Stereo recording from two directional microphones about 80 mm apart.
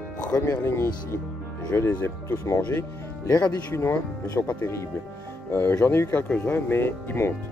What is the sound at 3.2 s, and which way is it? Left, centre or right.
Speech, left.